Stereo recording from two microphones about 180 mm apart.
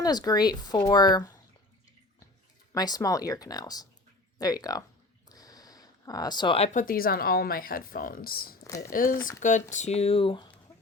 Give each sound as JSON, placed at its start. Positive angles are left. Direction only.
{"t": 0.0, "sound": "speech", "side_deg": 20}
{"t": 2.7, "sound": "speech", "side_deg": 20}
{"t": 5.3, "sound": "a sound", "side_deg": 20}
{"t": 6.7, "sound": "speech", "side_deg": 55}
{"t": 8.6, "sound": "speech", "side_deg": 15}
{"t": 8.9, "sound": "speech", "side_deg": 50}